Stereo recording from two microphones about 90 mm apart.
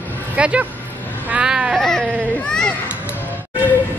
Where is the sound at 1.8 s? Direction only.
5° left (ahead or behind).